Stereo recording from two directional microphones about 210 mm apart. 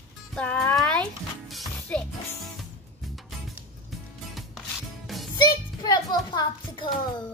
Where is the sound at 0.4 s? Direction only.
5° left (ahead or behind).